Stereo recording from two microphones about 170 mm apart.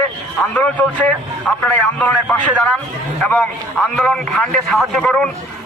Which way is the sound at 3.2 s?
5° left (ahead or behind).